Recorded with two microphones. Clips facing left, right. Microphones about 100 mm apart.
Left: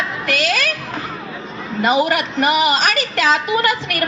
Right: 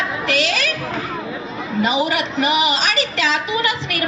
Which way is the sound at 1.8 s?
50° left (ahead or behind).